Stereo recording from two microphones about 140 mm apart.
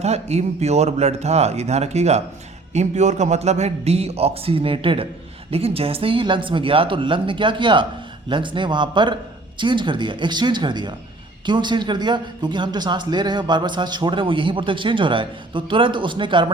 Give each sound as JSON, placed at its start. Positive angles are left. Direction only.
{"t": 0.0, "sound": "a man's voice", "side_deg": -50}